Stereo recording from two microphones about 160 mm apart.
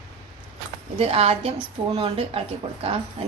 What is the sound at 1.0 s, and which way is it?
A woman's voice, 40° right (ahead or behind).